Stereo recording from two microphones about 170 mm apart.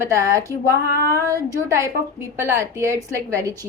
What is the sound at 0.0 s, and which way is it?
A woman's voice, 20° right (ahead or behind).